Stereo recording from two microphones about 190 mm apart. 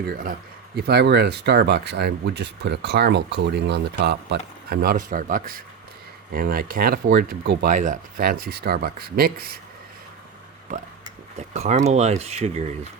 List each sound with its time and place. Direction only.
0.1 s speech: 50° right (ahead or behind)
11.3 s speech: 35° right (ahead or behind)